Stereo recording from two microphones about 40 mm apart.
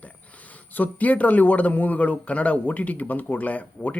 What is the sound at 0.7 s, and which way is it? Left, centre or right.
Speech, left.